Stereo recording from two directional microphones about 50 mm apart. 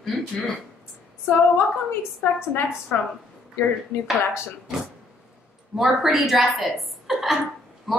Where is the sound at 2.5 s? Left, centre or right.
Left.